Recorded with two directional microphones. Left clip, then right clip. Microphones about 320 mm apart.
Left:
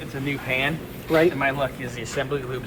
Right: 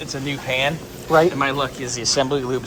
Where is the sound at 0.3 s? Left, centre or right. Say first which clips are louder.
Right 3 dB; centre.